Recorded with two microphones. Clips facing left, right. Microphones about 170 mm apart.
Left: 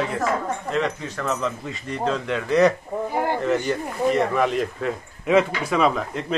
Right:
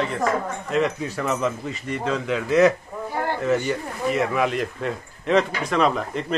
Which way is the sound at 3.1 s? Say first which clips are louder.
Left 2 dB; 15° left (ahead or behind).